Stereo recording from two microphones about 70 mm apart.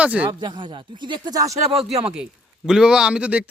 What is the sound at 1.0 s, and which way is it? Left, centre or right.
Speech, right.